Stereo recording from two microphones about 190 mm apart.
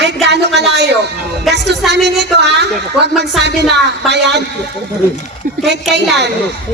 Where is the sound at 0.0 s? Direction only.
65° right (ahead or behind).